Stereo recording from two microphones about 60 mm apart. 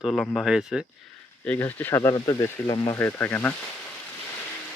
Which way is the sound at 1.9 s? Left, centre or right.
Left.